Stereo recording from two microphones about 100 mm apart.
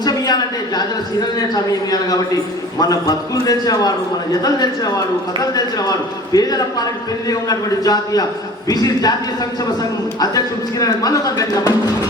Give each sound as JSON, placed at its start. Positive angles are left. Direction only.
{"t": 0.0, "sound": "a sound", "side_deg": 40}
{"t": 2.7, "sound": "speech", "side_deg": 40}
{"t": 10.2, "sound": "speech", "side_deg": 40}